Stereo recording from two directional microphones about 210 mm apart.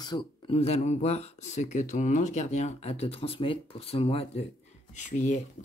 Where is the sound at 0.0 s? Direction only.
20° left (ahead or behind).